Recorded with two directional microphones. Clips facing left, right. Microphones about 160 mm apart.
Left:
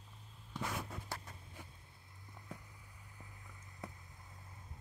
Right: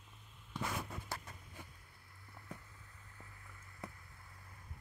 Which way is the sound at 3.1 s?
15° left (ahead or behind).